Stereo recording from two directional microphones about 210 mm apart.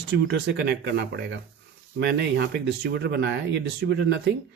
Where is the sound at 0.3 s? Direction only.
55° right (ahead or behind).